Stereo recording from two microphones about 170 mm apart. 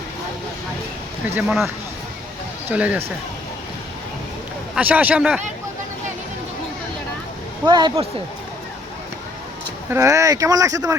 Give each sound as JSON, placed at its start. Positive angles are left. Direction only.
{"t": 1.4, "sound": "speech", "side_deg": -5}
{"t": 4.7, "sound": "speech", "side_deg": -10}
{"t": 7.6, "sound": "speech", "side_deg": -25}
{"t": 9.9, "sound": "speech", "side_deg": -15}